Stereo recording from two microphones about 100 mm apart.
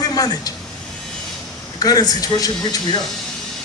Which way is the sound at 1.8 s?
40° left (ahead or behind).